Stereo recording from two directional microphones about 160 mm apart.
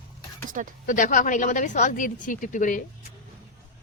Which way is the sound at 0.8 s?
55° left (ahead or behind).